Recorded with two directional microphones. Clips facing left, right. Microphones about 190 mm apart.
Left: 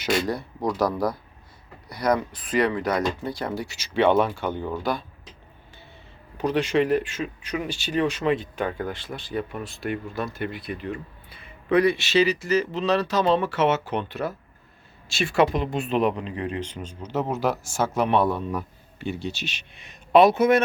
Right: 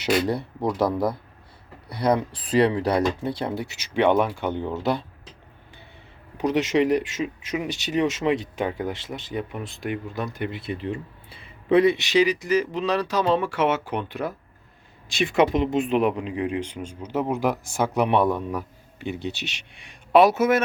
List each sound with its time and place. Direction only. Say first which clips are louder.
0.8 s speech: right 1 dB; 25° right (ahead or behind)
6.3 s speech: right 1 dB; 15° right (ahead or behind)
19.3 s speech: even; 70° right (ahead or behind)
19.7 s speech: even; 10° right (ahead or behind)